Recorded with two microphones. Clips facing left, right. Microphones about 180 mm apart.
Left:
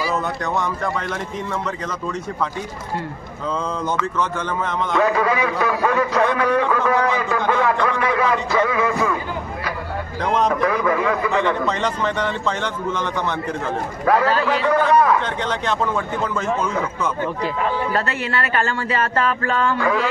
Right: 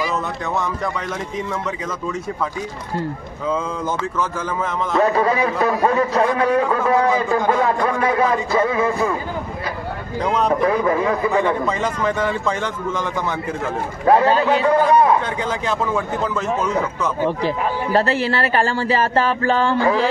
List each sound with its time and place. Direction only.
4.2 s speech: 5° right (ahead or behind)
4.9 s a man's voice: 30° right (ahead or behind)
10.2 s speech: 5° right (ahead or behind)
10.5 s a man's voice: 30° right (ahead or behind)
11.4 s a man's voice: 5° right (ahead or behind)
14.0 s a man's voice: 25° right (ahead or behind)
15.4 s speech: 5° right (ahead or behind)
17.9 s a man's voice: 30° right (ahead or behind)